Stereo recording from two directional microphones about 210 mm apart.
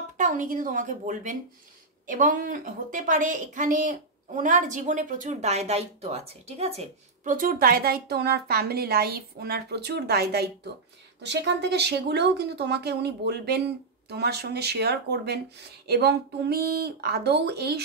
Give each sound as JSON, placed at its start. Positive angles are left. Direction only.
{"t": 0.2, "sound": "a woman's voice", "side_deg": -40}